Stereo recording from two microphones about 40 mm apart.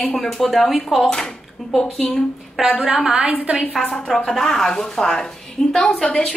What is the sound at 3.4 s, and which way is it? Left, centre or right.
Speech, right.